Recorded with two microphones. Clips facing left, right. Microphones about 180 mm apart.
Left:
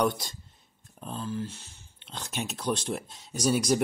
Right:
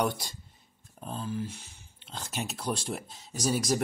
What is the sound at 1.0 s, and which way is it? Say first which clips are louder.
Speech: left 1 dB; 10° right (ahead or behind).